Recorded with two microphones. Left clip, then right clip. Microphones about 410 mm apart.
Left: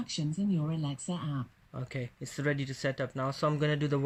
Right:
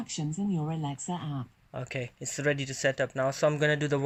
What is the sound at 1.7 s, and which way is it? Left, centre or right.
Speech, centre.